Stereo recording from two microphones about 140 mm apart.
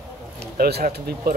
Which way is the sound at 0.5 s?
90° right.